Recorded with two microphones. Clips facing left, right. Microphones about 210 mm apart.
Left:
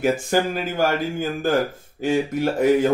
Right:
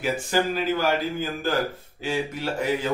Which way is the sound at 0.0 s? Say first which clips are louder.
Left 4 dB; 50° left (ahead or behind).